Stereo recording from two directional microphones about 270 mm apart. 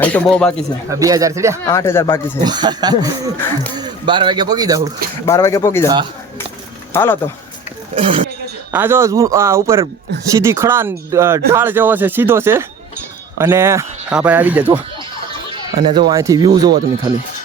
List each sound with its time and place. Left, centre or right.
0.0 s speech: centre
0.9 s speech: centre
1.6 s speech: centre
2.4 s a man's voice: centre
5.2 s speech: centre
6.9 s speech: centre
7.9 s speech: centre
8.7 s speech: centre
15.4 s speech: centre